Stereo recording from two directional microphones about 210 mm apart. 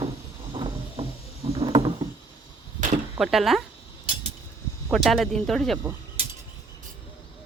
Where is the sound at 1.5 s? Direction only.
20° right (ahead or behind).